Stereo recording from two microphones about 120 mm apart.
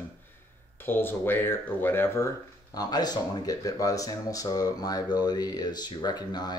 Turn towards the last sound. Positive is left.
turn(degrees=35)  # may be behind; listen again after turning